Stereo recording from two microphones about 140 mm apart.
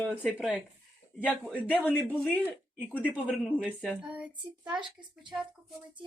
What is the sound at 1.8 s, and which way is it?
Speech, 10° left (ahead or behind).